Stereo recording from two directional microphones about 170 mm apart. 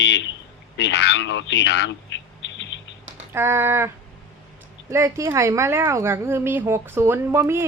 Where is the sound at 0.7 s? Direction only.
90° left.